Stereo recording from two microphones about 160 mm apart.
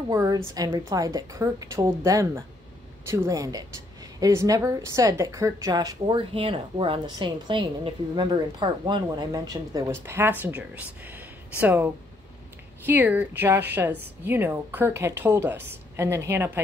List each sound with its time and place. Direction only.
0.1 s a woman's voice: 20° right (ahead or behind)